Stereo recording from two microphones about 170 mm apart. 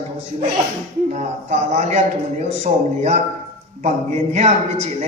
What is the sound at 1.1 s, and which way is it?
Speech, 45° right (ahead or behind).